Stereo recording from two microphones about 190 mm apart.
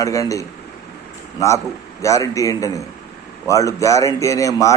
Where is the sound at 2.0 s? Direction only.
15° left (ahead or behind).